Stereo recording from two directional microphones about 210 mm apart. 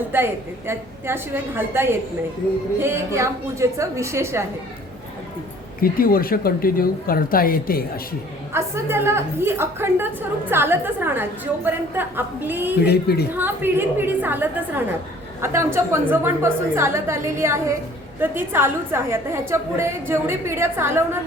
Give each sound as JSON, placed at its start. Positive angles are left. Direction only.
{"t": 0.1, "sound": "a woman's voice", "side_deg": -10}
{"t": 5.8, "sound": "a woman's voice", "side_deg": 45}
{"t": 8.5, "sound": "a woman's voice", "side_deg": -10}
{"t": 12.8, "sound": "a woman's voice", "side_deg": 50}
{"t": 13.3, "sound": "a woman's voice", "side_deg": -10}